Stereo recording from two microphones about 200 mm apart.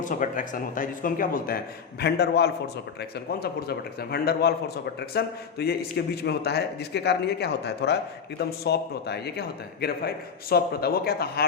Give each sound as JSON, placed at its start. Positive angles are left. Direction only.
{"t": 0.0, "sound": "a man's voice", "side_deg": 40}